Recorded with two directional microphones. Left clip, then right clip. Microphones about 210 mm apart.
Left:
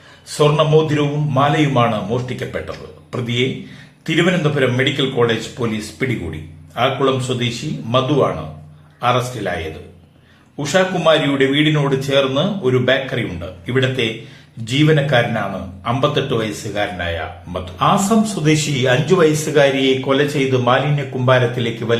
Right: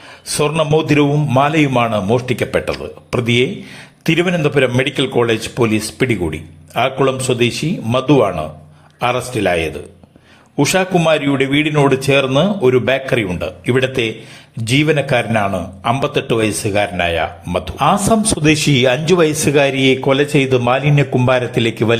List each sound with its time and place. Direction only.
0.3 s speech: 35° right (ahead or behind)
10.6 s speech: 35° right (ahead or behind)